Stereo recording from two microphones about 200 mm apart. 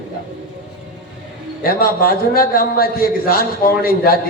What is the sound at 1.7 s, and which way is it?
A man's voice, 45° left (ahead or behind).